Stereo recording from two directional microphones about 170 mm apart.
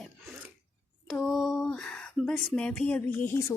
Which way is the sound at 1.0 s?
Centre (ahead or behind).